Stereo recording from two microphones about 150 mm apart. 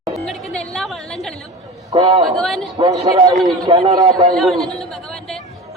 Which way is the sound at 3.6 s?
30° right (ahead or behind).